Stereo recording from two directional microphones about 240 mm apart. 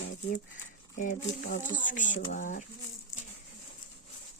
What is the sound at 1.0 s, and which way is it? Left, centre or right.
Speech, left.